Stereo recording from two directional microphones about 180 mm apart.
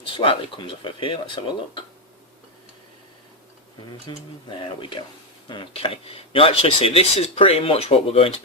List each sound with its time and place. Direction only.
0.2 s speech: 30° left (ahead or behind)
4.0 s speech: 25° left (ahead or behind)